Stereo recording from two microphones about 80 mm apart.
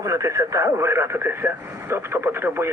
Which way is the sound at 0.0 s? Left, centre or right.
Right.